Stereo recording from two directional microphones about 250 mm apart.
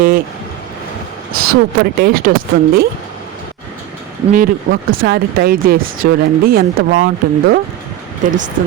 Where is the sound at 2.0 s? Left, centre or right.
Right.